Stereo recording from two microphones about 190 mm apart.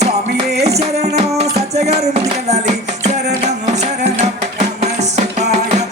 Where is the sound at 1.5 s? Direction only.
35° right (ahead or behind).